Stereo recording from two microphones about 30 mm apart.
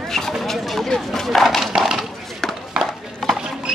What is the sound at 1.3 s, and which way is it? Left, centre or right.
Horse, centre.